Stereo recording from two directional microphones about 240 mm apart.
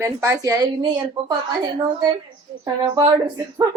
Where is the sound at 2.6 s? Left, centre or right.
Centre.